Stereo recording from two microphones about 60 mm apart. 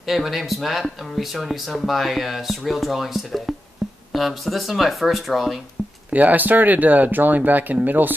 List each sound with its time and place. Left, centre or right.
0.0 s speech: centre
6.1 s speech: right